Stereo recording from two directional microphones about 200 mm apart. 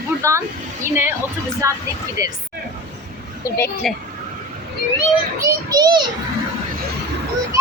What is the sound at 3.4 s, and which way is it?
Speech, 15° left (ahead or behind).